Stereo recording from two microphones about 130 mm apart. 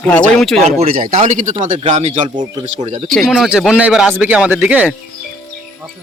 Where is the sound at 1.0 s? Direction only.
70° right (ahead or behind).